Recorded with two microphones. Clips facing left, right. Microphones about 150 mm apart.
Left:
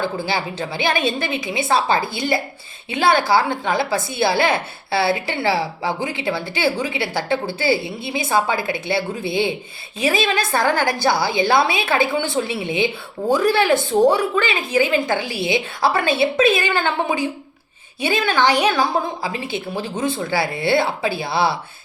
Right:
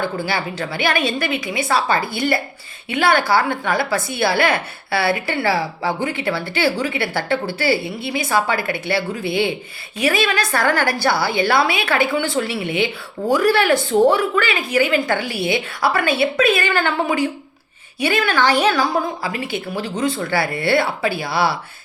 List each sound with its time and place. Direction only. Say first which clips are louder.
0.0 s a woman's voice: even; 20° left (ahead or behind)